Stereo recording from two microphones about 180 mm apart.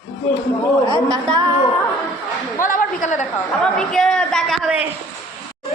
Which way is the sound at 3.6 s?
5° left (ahead or behind).